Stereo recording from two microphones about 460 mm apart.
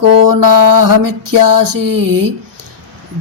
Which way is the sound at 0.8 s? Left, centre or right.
Right.